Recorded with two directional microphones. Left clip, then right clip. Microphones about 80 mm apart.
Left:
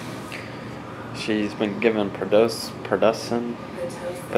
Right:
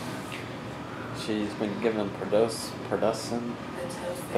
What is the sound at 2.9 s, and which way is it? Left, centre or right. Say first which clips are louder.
Speech: left 7 dB; left.